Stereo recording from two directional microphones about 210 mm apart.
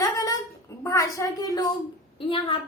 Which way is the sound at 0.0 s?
15° left (ahead or behind).